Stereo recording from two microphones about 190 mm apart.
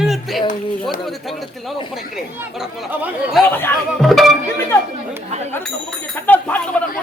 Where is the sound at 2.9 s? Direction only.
5° right (ahead or behind).